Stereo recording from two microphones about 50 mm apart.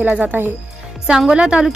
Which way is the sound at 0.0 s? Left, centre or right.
Right.